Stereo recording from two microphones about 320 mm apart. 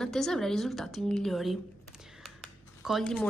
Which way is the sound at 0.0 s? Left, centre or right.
Centre.